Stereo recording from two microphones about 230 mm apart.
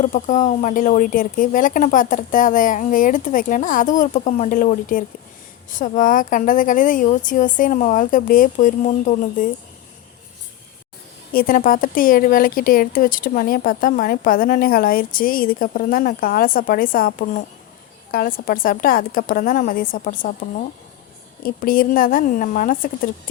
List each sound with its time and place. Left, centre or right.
0.0 s speech: left
11.3 s speech: left
21.4 s speech: left